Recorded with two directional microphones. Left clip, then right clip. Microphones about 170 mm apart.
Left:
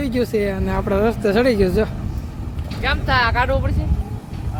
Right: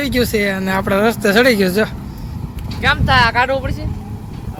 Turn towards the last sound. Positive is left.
turn(degrees=-50)  # may be behind; listen again after turning